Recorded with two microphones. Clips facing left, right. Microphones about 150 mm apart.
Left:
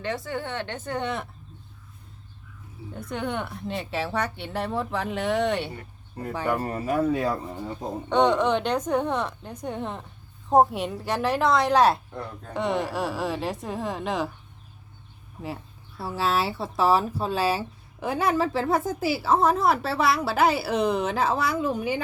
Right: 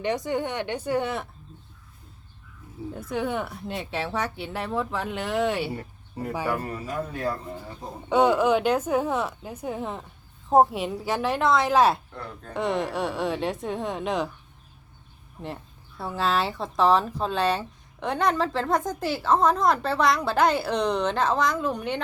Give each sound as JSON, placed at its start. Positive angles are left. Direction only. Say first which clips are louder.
{"t": 0.0, "sound": "speech", "louder": "right 4 dB", "side_deg": -15}
{"t": 2.9, "sound": "speech", "louder": "right 2 dB", "side_deg": -5}
{"t": 6.6, "sound": "a man's voice", "louder": "left 3 dB", "side_deg": 45}
{"t": 6.8, "sound": "speech", "louder": "left 8 dB", "side_deg": 75}
{"t": 8.1, "sound": "speech", "louder": "right 1 dB", "side_deg": -5}
{"t": 16.0, "sound": "speech", "louder": "even", "side_deg": 5}